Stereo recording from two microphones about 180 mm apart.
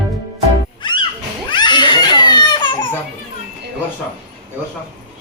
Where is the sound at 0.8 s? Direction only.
25° left (ahead or behind).